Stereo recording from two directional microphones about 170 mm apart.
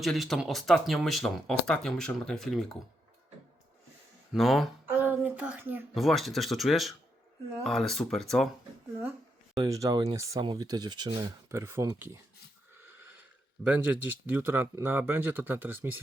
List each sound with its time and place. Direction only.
0.0 s speech: centre (ahead or behind)
4.3 s speech: centre (ahead or behind)
4.9 s a sound: 10° right (ahead or behind)
5.9 s speech: centre (ahead or behind)
9.6 s speech: 20° right (ahead or behind)
12.8 s a sound: 10° right (ahead or behind)
13.7 s speech: 10° right (ahead or behind)